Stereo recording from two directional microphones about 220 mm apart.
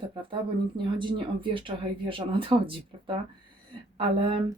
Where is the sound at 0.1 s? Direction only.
25° right (ahead or behind).